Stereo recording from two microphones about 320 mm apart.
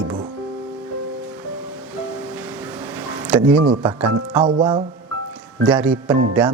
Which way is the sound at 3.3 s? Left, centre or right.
Centre.